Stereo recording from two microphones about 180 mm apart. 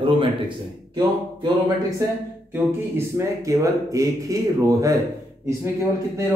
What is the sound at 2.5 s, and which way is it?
A man's voice, 15° right (ahead or behind).